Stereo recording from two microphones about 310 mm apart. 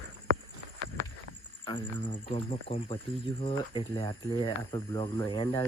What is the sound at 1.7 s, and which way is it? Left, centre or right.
Speech, centre.